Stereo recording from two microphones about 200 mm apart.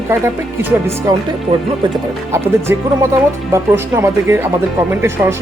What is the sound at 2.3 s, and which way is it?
Speech, 15° right (ahead or behind).